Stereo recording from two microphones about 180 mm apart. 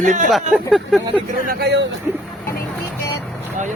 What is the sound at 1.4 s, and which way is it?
Speech, 65° right (ahead or behind).